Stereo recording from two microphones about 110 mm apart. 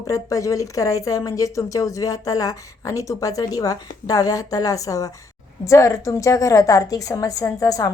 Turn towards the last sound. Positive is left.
turn(degrees=35)  # may be behind; listen again after turning